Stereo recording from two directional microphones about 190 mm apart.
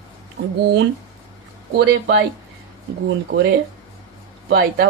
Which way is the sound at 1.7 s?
65° right (ahead or behind).